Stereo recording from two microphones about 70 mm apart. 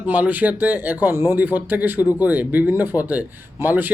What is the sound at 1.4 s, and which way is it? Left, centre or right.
Speech, right.